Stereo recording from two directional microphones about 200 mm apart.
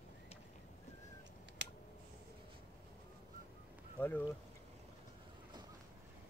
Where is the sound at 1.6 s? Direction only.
60° right (ahead or behind).